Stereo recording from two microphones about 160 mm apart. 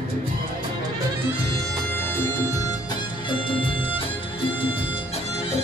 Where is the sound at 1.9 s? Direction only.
15° left (ahead or behind).